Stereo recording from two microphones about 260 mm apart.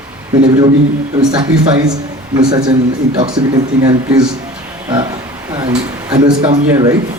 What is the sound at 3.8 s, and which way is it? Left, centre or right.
Speech, centre.